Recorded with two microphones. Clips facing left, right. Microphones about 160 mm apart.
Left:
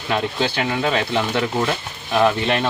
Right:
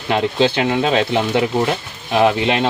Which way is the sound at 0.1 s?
20° right (ahead or behind).